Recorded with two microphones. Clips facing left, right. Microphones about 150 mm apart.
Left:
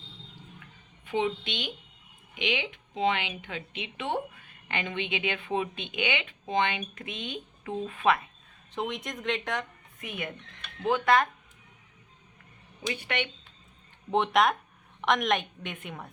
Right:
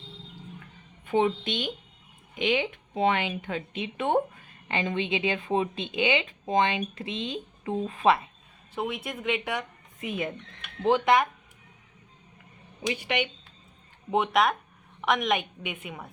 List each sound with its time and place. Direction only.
1.0 s a woman's voice: 45° right (ahead or behind)
4.7 s speech: 35° right (ahead or behind)
8.7 s speech: 5° right (ahead or behind)
10.0 s speech: 30° right (ahead or behind)
12.8 s speech: 15° right (ahead or behind)
14.1 s a woman's voice: 5° right (ahead or behind)